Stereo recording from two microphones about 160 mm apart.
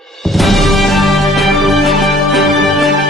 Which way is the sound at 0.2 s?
Centre (ahead or behind).